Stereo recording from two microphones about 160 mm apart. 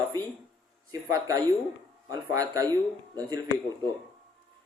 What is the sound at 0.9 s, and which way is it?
A man's voice, 20° right (ahead or behind).